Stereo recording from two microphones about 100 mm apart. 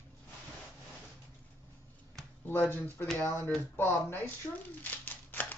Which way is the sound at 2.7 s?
20° left (ahead or behind).